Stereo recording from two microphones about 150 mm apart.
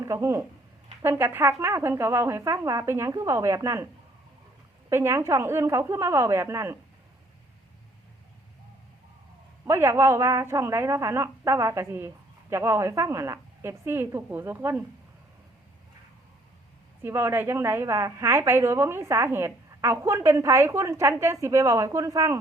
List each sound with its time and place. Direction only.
0.0 s a woman's voice: 20° right (ahead or behind)
4.9 s a woman's voice: 15° right (ahead or behind)
9.6 s a woman's voice: 15° right (ahead or behind)
17.0 s a woman's voice: 15° right (ahead or behind)